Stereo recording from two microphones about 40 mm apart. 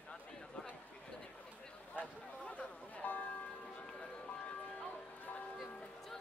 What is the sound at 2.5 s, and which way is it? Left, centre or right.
Chatter, left.